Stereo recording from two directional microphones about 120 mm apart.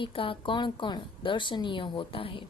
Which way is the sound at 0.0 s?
45° left (ahead or behind).